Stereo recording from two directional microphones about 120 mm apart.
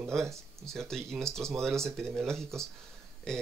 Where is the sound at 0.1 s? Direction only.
5° left (ahead or behind).